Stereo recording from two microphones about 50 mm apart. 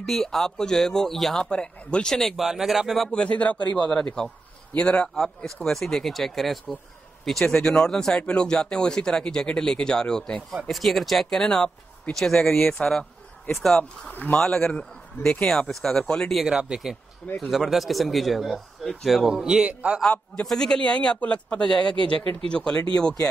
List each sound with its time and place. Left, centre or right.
0.0 s speech: centre
1.4 s a man's voice: centre
2.3 s speech: centre
3.1 s a man's voice: left
3.8 s speech: centre
5.1 s speech: centre
8.2 s speech: left
10.7 s speech: centre
14.1 s a man's voice: left
14.4 s speech: centre
16.4 s speech: centre
19.4 s speech: centre
20.4 s a man's voice: centre